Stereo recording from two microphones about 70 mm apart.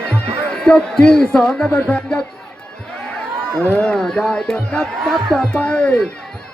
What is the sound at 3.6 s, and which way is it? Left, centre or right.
Speech, centre.